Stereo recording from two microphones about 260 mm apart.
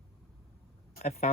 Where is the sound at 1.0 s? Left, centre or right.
Left.